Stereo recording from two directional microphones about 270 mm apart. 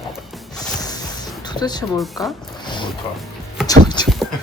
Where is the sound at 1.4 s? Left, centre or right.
Centre.